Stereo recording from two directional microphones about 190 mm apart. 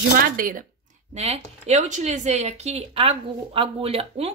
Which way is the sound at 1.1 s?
35° right (ahead or behind).